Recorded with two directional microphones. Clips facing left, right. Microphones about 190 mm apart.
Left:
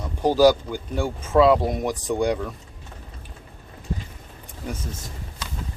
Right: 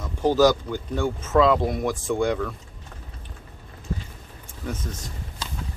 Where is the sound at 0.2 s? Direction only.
10° left (ahead or behind).